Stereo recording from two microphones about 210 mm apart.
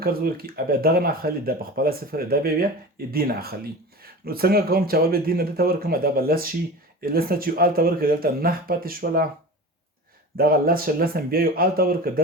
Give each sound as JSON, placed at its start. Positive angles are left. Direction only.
{"t": 0.0, "sound": "speech", "side_deg": -45}
{"t": 10.3, "sound": "speech", "side_deg": -45}